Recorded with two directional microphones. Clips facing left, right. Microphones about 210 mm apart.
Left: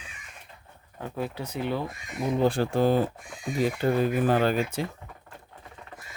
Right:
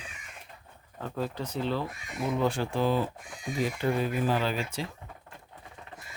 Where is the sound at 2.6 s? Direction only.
45° left (ahead or behind).